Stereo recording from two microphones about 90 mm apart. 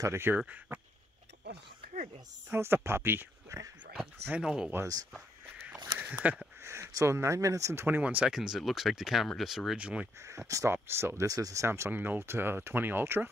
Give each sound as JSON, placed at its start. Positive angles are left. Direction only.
{"t": 0.0, "sound": "speech", "side_deg": -30}
{"t": 0.7, "sound": "a sound", "side_deg": -25}
{"t": 2.5, "sound": "speech", "side_deg": -25}
{"t": 4.3, "sound": "speech", "side_deg": -10}
{"t": 5.9, "sound": "a sound", "side_deg": -20}
{"t": 6.6, "sound": "speech", "side_deg": -30}
{"t": 7.8, "sound": "speech", "side_deg": -20}
{"t": 9.8, "sound": "speech", "side_deg": -15}
{"t": 10.2, "sound": "speech", "side_deg": -35}
{"t": 11.2, "sound": "speech", "side_deg": -40}